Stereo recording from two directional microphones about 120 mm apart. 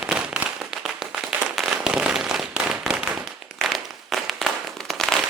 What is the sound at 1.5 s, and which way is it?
Firecracker, 5° right (ahead or behind).